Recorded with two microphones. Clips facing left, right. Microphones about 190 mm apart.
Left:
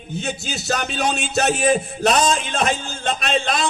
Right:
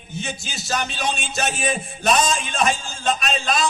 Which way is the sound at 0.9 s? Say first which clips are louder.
Left 5 dB; 65° left (ahead or behind).